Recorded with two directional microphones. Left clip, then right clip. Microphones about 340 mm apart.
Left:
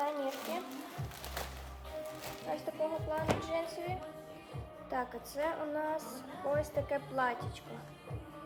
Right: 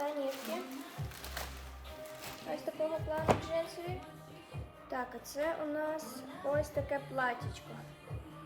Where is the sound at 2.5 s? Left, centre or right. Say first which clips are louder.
Left 2 dB; centre.